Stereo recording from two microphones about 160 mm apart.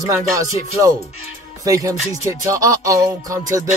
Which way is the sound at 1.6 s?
20° right (ahead or behind).